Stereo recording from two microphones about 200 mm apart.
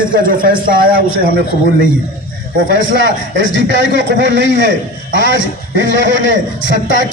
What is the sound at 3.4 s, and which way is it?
A man's voice, 65° right (ahead or behind).